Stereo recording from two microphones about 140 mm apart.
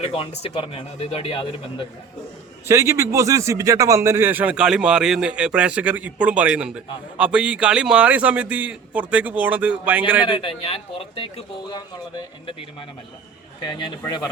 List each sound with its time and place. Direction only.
0.0 s speech: 45° left (ahead or behind)
2.6 s a man's voice: 20° right (ahead or behind)
10.2 s speech: 35° left (ahead or behind)
13.6 s speech: 35° left (ahead or behind)